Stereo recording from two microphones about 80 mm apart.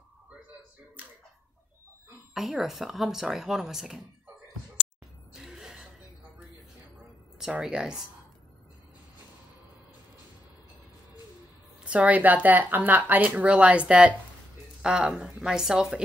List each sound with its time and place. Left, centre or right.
2.3 s speech: centre
5.3 s music: centre
7.3 s speech: centre
11.8 s speech: centre